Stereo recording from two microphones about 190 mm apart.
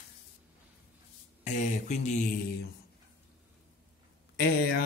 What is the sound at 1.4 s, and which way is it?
Speech, 40° left (ahead or behind).